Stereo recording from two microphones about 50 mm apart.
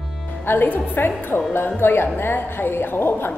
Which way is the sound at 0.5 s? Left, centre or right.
Left.